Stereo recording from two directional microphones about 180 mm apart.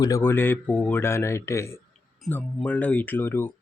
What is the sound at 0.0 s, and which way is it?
Speech, 15° left (ahead or behind).